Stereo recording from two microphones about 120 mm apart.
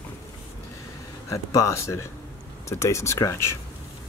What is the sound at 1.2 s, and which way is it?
Speech, 25° left (ahead or behind).